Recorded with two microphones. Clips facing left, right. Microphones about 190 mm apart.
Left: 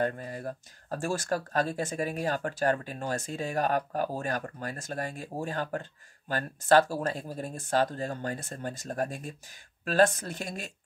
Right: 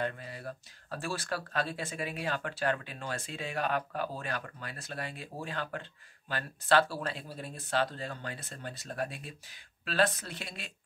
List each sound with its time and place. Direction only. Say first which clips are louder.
0.0 s speech: left 5 dB; 45° left (ahead or behind)